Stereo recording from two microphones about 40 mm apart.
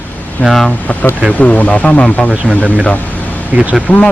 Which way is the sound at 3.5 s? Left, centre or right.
Right.